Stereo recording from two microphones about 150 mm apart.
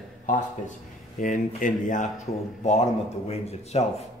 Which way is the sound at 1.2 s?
60° left (ahead or behind).